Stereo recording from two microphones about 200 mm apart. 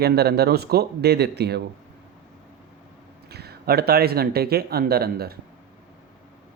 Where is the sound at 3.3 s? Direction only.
50° right (ahead or behind).